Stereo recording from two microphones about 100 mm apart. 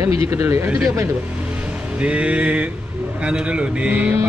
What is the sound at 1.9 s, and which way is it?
A man's voice, 10° right (ahead or behind).